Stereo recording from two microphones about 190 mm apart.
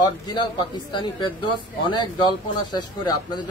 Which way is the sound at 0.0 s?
25° left (ahead or behind).